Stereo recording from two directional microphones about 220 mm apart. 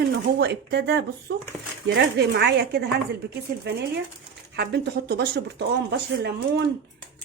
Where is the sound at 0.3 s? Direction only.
50° right (ahead or behind).